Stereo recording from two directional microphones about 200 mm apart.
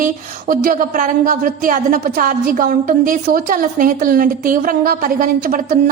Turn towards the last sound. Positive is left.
turn(degrees=-45)  # may be behind; listen again after turning